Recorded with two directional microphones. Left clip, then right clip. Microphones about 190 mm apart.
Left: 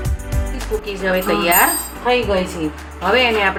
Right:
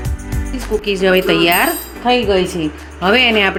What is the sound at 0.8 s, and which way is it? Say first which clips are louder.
A woman's voice: right 6 dB; 50° right (ahead or behind).